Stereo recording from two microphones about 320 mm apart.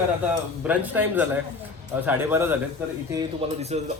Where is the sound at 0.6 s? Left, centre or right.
Centre.